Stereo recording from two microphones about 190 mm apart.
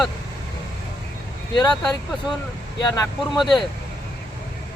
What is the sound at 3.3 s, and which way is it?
Speech, centre (ahead or behind).